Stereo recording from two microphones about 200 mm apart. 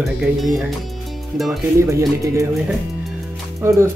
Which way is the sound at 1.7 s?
15° right (ahead or behind).